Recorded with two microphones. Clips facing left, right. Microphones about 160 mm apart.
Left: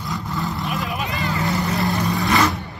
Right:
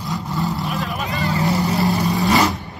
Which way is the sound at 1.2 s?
35° right (ahead or behind).